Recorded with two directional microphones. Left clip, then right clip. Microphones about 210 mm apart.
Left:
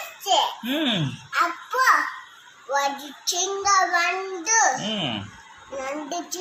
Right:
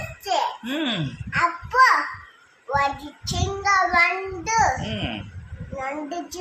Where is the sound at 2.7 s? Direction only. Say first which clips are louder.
Right 1 dB; 15° right (ahead or behind).